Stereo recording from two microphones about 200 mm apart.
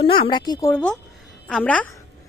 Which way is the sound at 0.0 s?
25° left (ahead or behind).